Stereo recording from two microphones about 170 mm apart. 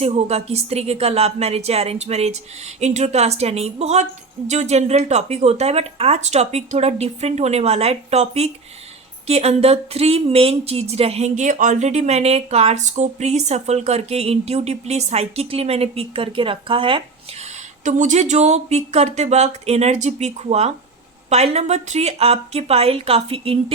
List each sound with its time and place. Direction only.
0.0 s speech: 40° right (ahead or behind)
17.8 s speech: 45° right (ahead or behind)